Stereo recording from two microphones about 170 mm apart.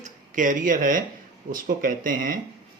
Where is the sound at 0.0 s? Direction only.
50° right (ahead or behind).